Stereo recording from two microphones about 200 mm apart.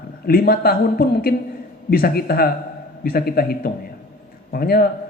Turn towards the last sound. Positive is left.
turn(degrees=50)  # may be behind; listen again after turning